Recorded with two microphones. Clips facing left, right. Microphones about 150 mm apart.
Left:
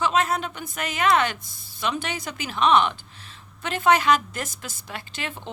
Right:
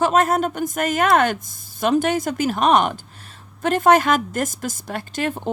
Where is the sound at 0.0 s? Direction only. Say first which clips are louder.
Right 6 dB; 45° right (ahead or behind).